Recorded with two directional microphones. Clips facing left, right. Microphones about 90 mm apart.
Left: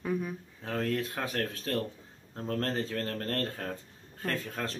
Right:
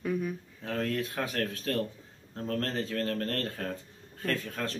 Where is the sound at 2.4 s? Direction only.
25° left (ahead or behind).